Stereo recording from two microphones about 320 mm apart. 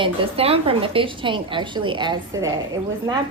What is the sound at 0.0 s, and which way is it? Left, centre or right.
A woman's voice, centre.